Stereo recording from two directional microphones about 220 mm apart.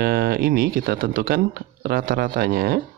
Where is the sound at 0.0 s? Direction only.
45° right (ahead or behind).